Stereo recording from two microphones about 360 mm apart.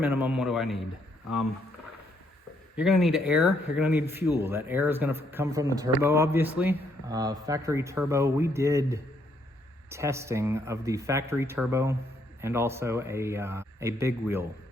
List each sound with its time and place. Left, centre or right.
0.0 s speech: centre
2.7 s speech: centre